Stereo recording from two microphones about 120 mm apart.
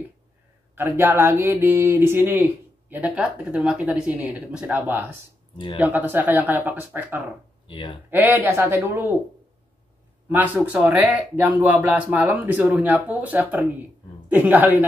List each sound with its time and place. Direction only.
0.7 s speech: 20° right (ahead or behind)
7.6 s speech: 45° left (ahead or behind)
8.1 s speech: 20° right (ahead or behind)
10.2 s speech: 15° right (ahead or behind)